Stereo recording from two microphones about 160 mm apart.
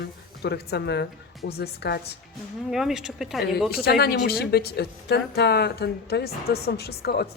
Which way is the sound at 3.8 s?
80° left.